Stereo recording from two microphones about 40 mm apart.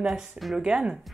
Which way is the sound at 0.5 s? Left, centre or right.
Right.